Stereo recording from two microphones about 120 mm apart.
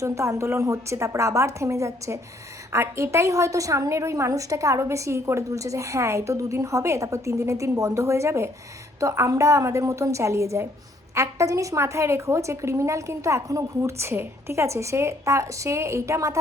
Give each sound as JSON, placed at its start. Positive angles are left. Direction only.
{"t": 0.0, "sound": "a woman's voice", "side_deg": -25}